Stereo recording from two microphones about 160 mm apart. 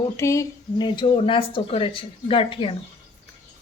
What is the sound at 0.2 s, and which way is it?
Speech, 20° left (ahead or behind).